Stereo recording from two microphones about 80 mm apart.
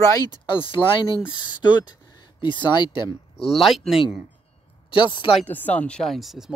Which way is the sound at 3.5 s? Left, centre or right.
Centre.